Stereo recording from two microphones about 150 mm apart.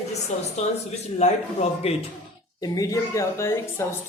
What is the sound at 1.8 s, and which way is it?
Speech, 40° left (ahead or behind).